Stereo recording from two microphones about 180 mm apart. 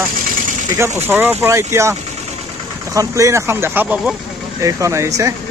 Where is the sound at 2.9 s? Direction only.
15° right (ahead or behind).